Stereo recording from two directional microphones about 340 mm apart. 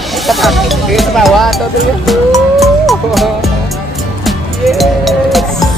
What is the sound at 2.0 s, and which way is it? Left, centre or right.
Music, centre.